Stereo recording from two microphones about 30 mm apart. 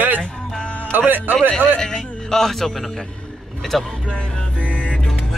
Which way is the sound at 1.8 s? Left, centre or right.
Centre.